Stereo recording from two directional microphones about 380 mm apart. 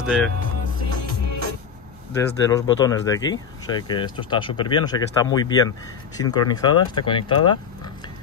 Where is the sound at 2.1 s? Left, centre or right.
Centre.